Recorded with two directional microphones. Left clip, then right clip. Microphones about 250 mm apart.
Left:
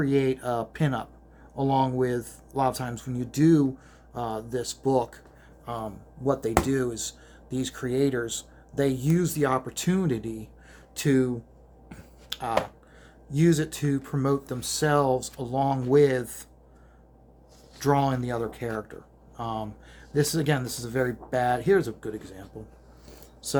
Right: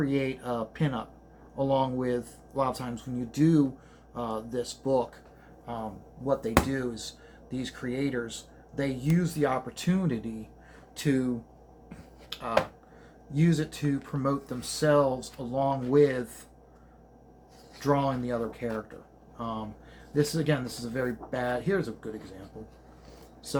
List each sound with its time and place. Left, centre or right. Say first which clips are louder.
0.0 s speech: left 5 dB; left
12.3 s a sound: left 4 dB; left
13.3 s speech: left 5 dB; left
17.7 s speech: left 3 dB; left